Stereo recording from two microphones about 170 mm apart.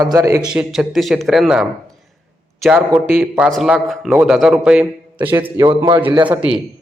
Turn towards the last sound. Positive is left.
turn(degrees=-5)  # may be behind; listen again after turning